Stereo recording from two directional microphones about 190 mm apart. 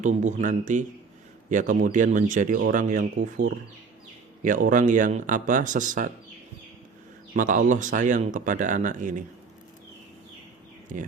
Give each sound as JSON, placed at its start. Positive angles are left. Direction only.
{"t": 0.0, "sound": "speech", "side_deg": -40}
{"t": 4.4, "sound": "speech", "side_deg": -45}
{"t": 7.3, "sound": "speech", "side_deg": -45}
{"t": 10.9, "sound": "speech", "side_deg": -45}